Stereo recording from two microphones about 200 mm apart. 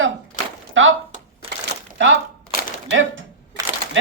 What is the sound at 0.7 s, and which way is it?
Speech, 75° right (ahead or behind).